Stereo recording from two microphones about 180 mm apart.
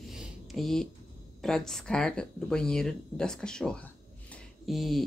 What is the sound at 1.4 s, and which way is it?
Speech, centre (ahead or behind).